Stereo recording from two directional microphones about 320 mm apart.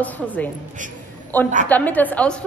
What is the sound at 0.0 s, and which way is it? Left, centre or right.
A woman's voice, centre.